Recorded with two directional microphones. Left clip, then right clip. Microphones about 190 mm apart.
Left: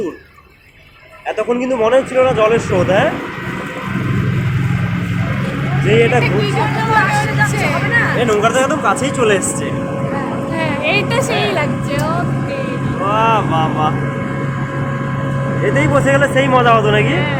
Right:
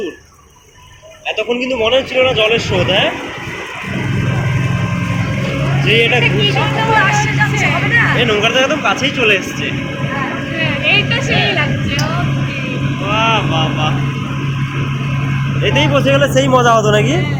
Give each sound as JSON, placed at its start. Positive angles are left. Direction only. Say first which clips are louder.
{"t": 1.4, "sound": "speech", "louder": "left 1 dB", "side_deg": 15}
{"t": 5.9, "sound": "speech", "louder": "even", "side_deg": 10}
{"t": 8.2, "sound": "speech", "louder": "right 1 dB", "side_deg": 15}
{"t": 10.6, "sound": "music", "louder": "right 3 dB", "side_deg": 65}
{"t": 13.1, "sound": "speech", "louder": "left 1 dB", "side_deg": 25}
{"t": 15.6, "sound": "speech", "louder": "right 1 dB", "side_deg": 0}
{"t": 16.3, "sound": "a man's voice", "louder": "right 1 dB", "side_deg": -15}